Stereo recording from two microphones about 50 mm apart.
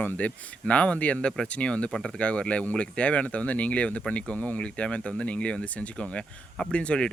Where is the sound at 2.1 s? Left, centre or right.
Left.